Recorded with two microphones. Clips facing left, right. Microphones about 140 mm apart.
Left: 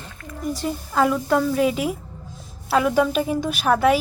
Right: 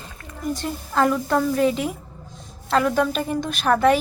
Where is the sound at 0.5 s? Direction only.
Centre (ahead or behind).